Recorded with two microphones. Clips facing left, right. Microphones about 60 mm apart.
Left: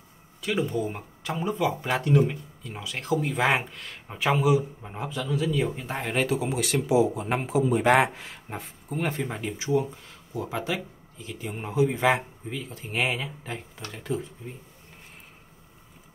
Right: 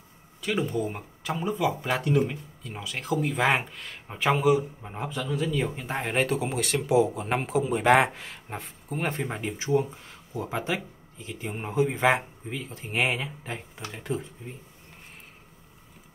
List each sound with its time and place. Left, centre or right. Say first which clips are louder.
0.4 s speech: left 1 dB; centre
5.9 s speech: right 1 dB; right
6.1 s speech: left 1 dB; right
11.7 s speech: even; right
12.2 s speech: even; centre
13.9 s speech: left 1 dB; right